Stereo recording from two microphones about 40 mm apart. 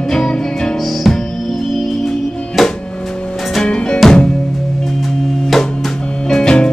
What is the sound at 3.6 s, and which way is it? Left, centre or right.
Music, left.